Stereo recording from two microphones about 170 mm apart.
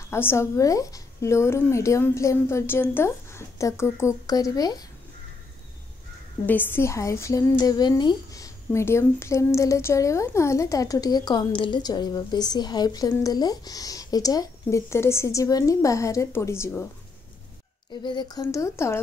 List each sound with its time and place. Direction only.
0.1 s a woman's voice: 15° left (ahead or behind)
6.4 s a woman's voice: 10° left (ahead or behind)
18.0 s a woman's voice: 25° left (ahead or behind)